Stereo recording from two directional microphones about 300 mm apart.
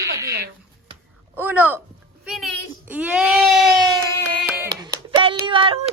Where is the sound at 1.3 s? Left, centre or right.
Centre.